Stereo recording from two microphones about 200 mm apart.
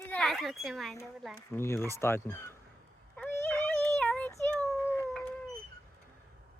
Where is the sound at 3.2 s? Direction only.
10° left (ahead or behind).